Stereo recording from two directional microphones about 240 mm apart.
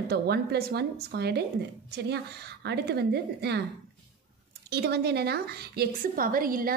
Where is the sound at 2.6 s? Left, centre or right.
Right.